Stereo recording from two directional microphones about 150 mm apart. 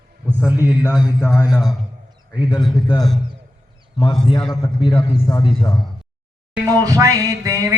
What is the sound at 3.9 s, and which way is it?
A man's voice, 35° left (ahead or behind).